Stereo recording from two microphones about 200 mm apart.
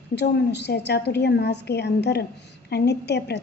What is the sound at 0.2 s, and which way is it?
A woman's voice, 55° left (ahead or behind).